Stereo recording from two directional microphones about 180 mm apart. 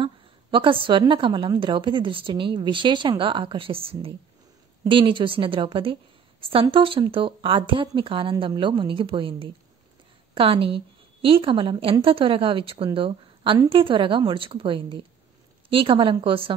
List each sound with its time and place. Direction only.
0.0 s a woman's voice: 30° right (ahead or behind)